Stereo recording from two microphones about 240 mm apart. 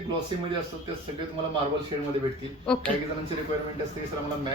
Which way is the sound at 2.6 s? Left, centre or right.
Centre.